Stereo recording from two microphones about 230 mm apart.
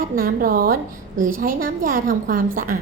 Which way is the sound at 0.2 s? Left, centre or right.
Right.